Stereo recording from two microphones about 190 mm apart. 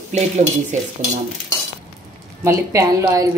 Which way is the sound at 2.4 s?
15° right (ahead or behind).